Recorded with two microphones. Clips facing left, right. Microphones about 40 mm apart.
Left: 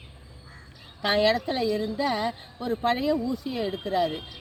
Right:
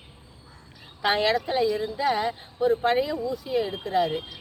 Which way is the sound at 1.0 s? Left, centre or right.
Centre.